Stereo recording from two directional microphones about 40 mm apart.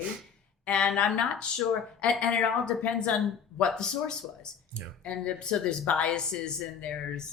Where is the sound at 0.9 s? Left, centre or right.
Left.